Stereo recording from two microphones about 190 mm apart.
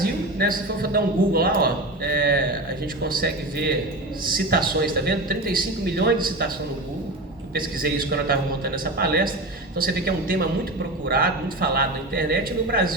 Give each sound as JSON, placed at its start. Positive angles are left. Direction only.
{"t": 0.0, "sound": "a man's voice", "side_deg": -50}
{"t": 7.5, "sound": "speech", "side_deg": -50}